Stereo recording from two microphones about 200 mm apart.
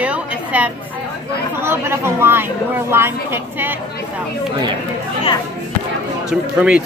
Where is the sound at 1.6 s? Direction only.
10° right (ahead or behind).